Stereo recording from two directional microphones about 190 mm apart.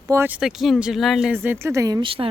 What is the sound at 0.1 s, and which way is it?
Speech, 10° right (ahead or behind).